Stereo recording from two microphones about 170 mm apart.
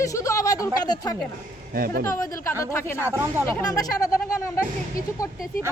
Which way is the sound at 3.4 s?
20° left (ahead or behind).